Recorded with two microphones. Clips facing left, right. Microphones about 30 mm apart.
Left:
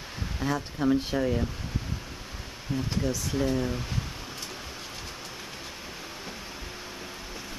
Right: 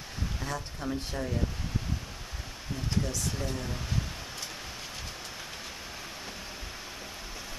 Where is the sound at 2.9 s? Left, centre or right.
Centre.